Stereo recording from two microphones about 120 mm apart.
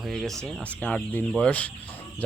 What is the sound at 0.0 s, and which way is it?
Speech, centre (ahead or behind).